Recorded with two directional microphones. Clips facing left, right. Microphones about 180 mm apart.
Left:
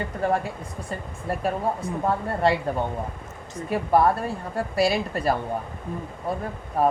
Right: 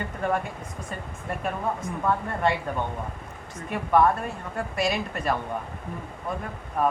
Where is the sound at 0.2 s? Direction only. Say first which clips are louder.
Left 3 dB; 35° left (ahead or behind).